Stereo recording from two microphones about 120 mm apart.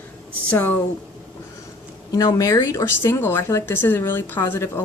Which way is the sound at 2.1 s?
30° left (ahead or behind).